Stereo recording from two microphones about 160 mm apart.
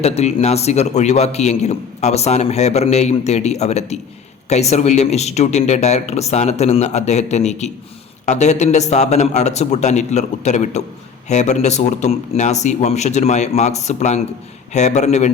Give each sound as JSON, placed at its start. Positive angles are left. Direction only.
{"t": 0.0, "sound": "a man's voice", "side_deg": 40}